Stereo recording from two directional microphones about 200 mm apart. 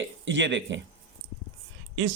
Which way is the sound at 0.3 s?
65° right (ahead or behind).